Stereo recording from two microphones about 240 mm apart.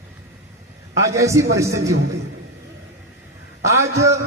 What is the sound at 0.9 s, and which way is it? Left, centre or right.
Speech, centre.